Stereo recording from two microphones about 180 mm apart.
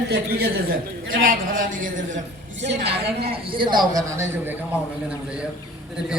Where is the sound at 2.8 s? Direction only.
65° right (ahead or behind).